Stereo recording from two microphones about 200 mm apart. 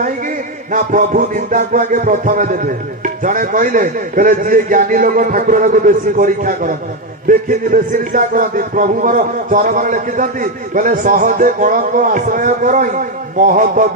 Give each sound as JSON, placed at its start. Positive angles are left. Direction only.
{"t": 0.7, "sound": "speech", "side_deg": -40}